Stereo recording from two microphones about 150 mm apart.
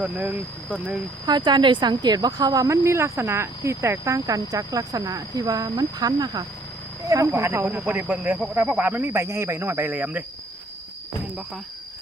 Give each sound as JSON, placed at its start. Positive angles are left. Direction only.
{"t": 0.0, "sound": "speech", "side_deg": -10}
{"t": 1.3, "sound": "speech", "side_deg": -30}